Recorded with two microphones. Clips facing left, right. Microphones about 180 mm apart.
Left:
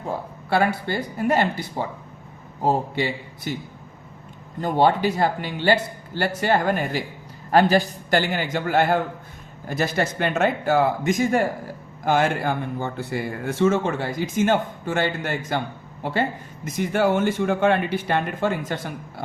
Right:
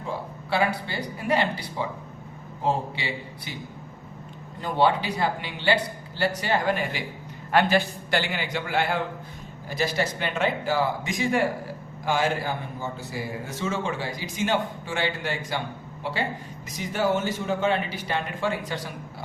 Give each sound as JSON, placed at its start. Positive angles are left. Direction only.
{"t": 0.9, "sound": "speech", "side_deg": 50}
{"t": 4.6, "sound": "speech", "side_deg": 45}
{"t": 16.6, "sound": "speech", "side_deg": 55}